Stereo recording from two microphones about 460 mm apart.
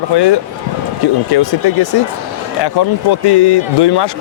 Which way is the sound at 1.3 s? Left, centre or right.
Left.